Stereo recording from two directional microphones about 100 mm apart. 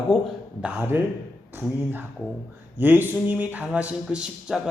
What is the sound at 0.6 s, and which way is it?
Speech, 20° right (ahead or behind).